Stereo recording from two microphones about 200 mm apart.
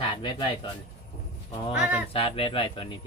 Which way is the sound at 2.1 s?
25° left (ahead or behind).